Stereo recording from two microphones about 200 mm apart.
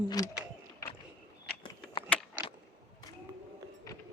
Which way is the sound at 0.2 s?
20° left (ahead or behind).